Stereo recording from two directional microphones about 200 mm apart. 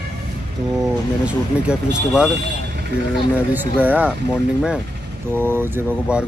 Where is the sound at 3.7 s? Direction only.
5° right (ahead or behind).